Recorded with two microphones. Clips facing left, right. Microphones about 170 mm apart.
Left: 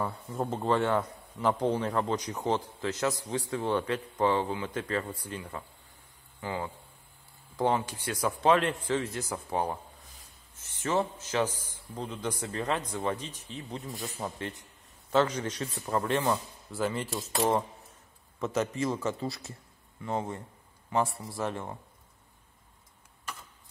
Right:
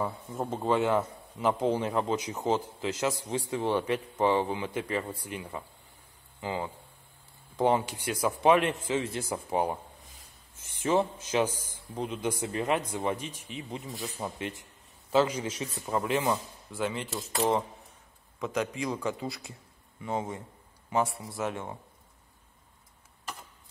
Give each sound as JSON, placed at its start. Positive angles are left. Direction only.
{"t": 0.0, "sound": "a man's voice", "side_deg": 0}
{"t": 7.8, "sound": "a man's voice", "side_deg": -10}
{"t": 9.5, "sound": "a man's voice", "side_deg": -15}
{"t": 10.8, "sound": "a man's voice", "side_deg": -15}
{"t": 13.8, "sound": "a man's voice", "side_deg": 0}
{"t": 18.8, "sound": "speech", "side_deg": 0}